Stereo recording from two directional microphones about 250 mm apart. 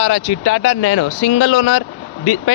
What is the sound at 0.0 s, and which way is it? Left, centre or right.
Speech, left.